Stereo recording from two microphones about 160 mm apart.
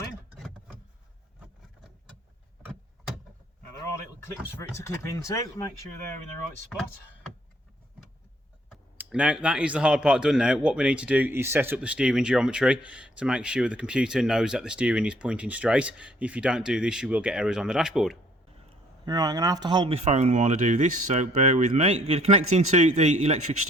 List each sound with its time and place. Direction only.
4.5 s speech: 15° left (ahead or behind)
9.0 s speech: 5° right (ahead or behind)
19.0 s speech: 20° right (ahead or behind); by 23.6 s 45° right (ahead or behind)